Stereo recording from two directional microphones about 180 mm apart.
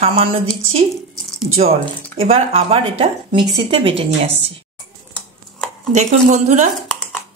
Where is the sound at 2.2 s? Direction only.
30° right (ahead or behind).